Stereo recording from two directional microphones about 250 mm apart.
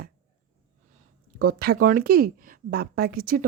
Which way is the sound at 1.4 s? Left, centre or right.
Right.